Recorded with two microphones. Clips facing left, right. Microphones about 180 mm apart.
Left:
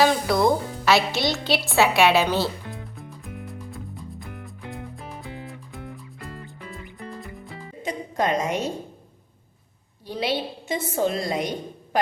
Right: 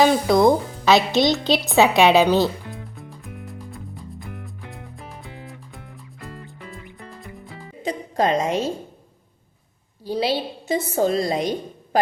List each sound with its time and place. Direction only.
0.0 s a woman's voice: 20° right (ahead or behind)
3.4 s music: centre (ahead or behind)
7.8 s a sound: 35° right (ahead or behind)
10.1 s a woman's voice: 35° right (ahead or behind)